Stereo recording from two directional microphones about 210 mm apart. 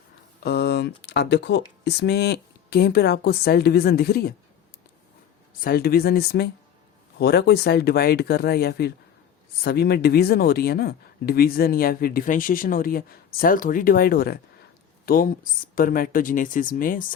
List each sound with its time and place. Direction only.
0.4 s speech: 50° left (ahead or behind)
5.5 s speech: 45° left (ahead or behind)